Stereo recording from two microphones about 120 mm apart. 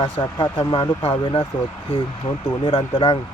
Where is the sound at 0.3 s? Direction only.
40° left (ahead or behind).